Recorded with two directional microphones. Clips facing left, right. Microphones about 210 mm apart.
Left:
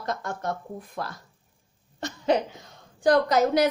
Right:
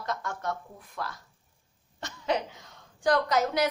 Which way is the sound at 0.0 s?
35° left (ahead or behind).